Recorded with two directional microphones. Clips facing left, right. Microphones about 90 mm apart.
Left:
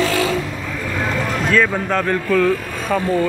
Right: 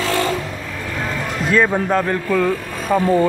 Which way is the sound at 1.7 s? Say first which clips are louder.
Right 1 dB; 15° right (ahead or behind).